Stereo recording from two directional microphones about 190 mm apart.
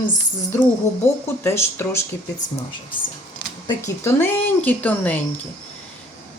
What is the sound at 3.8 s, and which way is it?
Speech, 15° left (ahead or behind).